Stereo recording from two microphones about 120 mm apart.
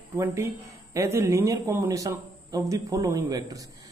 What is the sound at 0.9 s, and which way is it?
A man's voice, 25° right (ahead or behind).